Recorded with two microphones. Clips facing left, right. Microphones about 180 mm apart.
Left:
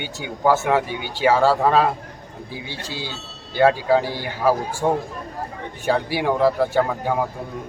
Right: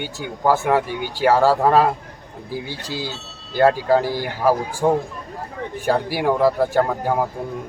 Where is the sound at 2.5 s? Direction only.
45° right (ahead or behind).